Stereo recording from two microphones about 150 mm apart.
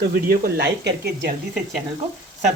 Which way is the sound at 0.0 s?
90° right.